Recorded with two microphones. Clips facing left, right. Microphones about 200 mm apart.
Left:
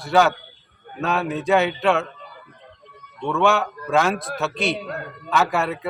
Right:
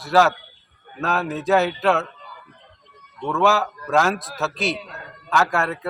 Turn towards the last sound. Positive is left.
turn(degrees=0)  # may be behind; listen again after turning